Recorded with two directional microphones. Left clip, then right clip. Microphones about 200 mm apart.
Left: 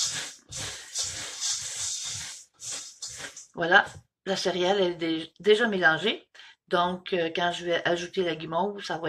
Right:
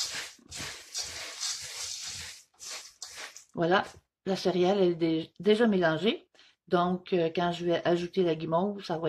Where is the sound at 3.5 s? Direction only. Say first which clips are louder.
Left 6 dB; 55° right (ahead or behind).